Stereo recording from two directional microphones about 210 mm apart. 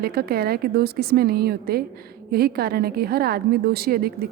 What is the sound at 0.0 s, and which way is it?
A woman's voice, 45° right (ahead or behind).